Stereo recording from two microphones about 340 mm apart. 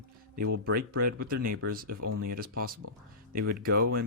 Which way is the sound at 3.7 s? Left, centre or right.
Right.